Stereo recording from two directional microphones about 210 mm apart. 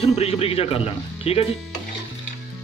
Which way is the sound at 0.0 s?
30° left (ahead or behind).